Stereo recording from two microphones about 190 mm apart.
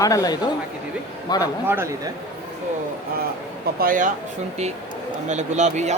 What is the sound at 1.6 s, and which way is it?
Speech, 10° right (ahead or behind).